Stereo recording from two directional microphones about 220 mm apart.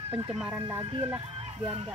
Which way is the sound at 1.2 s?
25° right (ahead or behind).